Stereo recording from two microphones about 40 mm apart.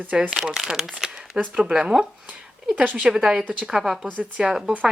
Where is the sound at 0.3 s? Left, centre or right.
Centre.